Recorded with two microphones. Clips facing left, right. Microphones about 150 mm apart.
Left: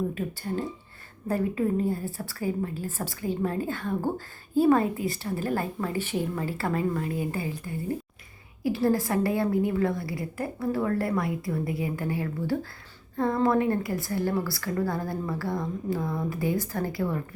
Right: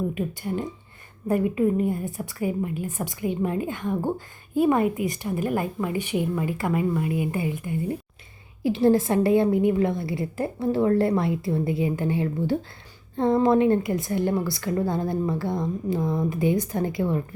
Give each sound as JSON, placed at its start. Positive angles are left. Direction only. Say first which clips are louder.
{"t": 0.1, "sound": "a woman's voice", "louder": "right 3 dB", "side_deg": -15}